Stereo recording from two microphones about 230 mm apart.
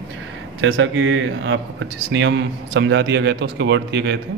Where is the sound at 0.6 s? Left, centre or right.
Right.